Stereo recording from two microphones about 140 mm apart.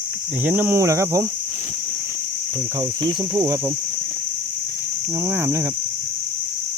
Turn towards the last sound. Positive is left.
turn(degrees=-15)  # may be behind; listen again after turning